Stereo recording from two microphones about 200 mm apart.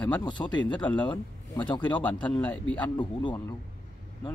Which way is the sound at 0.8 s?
10° left (ahead or behind).